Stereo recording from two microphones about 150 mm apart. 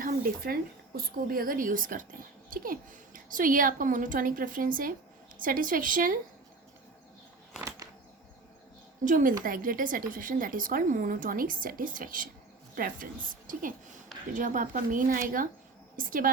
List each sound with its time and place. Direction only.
0.0 s a woman's voice: 70° right (ahead or behind)
9.0 s a woman's voice: 65° right (ahead or behind)